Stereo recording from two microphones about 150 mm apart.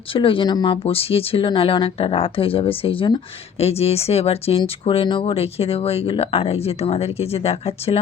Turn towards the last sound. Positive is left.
turn(degrees=40)  # may be behind; listen again after turning